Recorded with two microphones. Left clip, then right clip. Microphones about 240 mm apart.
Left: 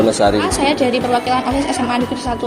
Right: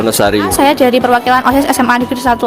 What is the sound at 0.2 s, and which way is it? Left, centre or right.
A woman's voice, right.